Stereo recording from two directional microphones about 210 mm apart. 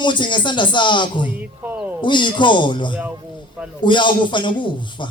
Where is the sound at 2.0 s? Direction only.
20° left (ahead or behind).